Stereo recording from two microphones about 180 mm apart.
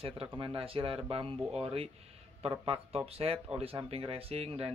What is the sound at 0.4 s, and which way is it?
Speech, 30° right (ahead or behind).